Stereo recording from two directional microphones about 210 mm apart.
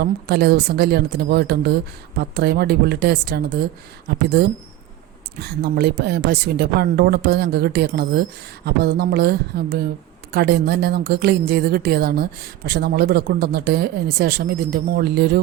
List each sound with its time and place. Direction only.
0.0 s a woman's voice: 50° right (ahead or behind)
5.4 s a woman's voice: 50° right (ahead or behind)